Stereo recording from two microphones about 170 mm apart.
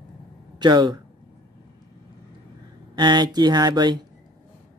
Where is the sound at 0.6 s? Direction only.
25° right (ahead or behind).